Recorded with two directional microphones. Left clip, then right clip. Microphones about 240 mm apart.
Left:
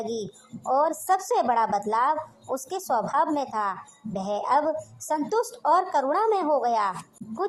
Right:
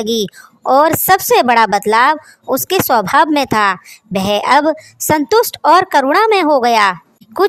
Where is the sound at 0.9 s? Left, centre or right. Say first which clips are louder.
Right 13 dB; right.